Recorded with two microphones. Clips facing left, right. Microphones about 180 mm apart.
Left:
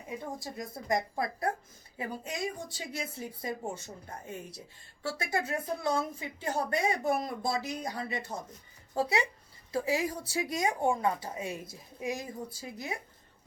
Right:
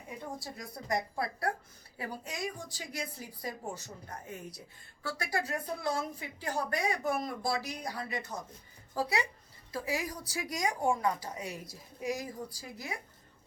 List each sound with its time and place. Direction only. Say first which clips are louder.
0.3 s a woman's voice: left 3 dB; 20° left (ahead or behind)